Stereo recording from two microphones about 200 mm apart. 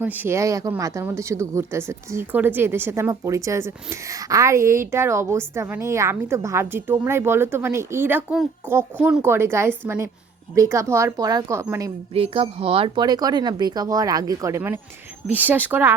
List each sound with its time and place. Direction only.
0.0 s speech: 10° right (ahead or behind)
12.1 s speech: 30° right (ahead or behind); by 16.0 s 10° right (ahead or behind)